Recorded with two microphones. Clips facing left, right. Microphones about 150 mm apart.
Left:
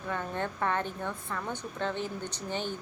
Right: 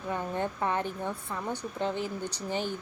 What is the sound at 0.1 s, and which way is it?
Speech, 15° right (ahead or behind).